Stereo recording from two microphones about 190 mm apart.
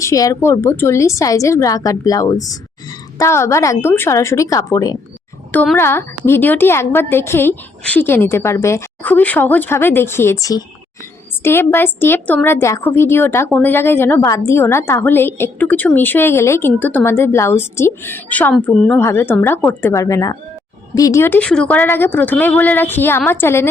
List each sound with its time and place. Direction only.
0.0 s a woman's voice: 15° left (ahead or behind)